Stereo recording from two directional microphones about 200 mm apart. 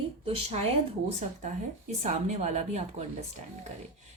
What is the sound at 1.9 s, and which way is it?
Speech, 35° right (ahead or behind).